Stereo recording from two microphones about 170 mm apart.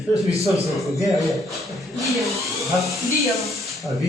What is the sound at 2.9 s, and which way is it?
Speech, centre (ahead or behind).